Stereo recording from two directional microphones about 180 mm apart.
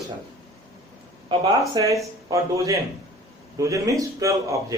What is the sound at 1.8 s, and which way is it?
A man's voice, 25° right (ahead or behind).